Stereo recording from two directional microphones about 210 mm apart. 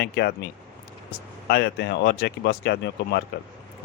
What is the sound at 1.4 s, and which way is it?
Speech, 50° left (ahead or behind).